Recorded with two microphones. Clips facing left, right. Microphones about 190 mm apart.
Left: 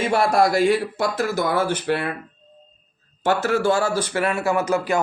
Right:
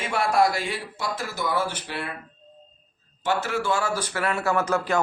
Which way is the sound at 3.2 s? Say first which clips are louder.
Left 6 dB; 45° left (ahead or behind).